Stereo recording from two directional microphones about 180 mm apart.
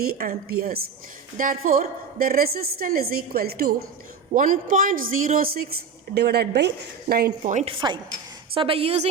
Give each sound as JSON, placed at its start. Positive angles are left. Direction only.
{"t": 0.0, "sound": "a woman's voice", "side_deg": -55}
{"t": 7.5, "sound": "a woman's voice", "side_deg": -30}